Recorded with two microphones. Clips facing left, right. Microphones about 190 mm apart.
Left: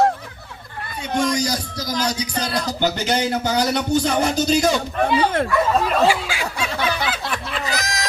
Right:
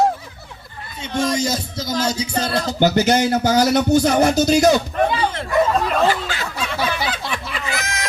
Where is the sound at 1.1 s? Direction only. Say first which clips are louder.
Right 1 dB; 25° right (ahead or behind).